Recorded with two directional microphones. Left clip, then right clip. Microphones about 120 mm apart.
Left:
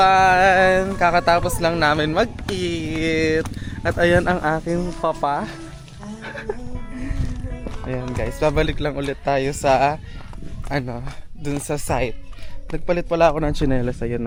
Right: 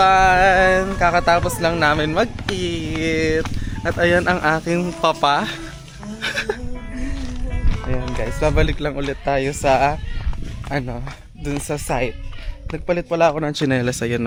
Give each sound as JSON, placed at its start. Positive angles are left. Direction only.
{"t": 0.0, "sound": "a man's voice", "side_deg": 10}
{"t": 3.8, "sound": "speech", "side_deg": 25}
{"t": 4.4, "sound": "a man's voice", "side_deg": 5}
{"t": 4.6, "sound": "speech", "side_deg": -5}
{"t": 4.9, "sound": "speech", "side_deg": -15}
{"t": 6.2, "sound": "music", "side_deg": -25}
{"t": 7.9, "sound": "music", "side_deg": 25}
{"t": 8.4, "sound": "a man's voice", "side_deg": 15}
{"t": 13.8, "sound": "speech", "side_deg": -25}